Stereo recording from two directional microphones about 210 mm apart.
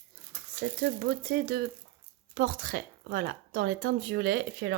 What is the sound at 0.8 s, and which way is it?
Speech, 50° right (ahead or behind).